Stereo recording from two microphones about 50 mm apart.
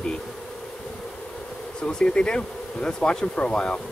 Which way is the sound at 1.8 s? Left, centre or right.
Centre.